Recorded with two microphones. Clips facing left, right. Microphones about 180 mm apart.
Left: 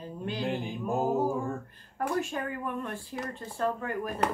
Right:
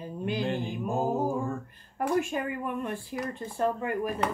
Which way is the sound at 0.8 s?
15° right (ahead or behind).